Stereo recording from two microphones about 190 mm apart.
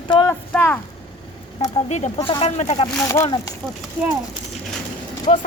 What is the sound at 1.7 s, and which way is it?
Speech, 35° left (ahead or behind).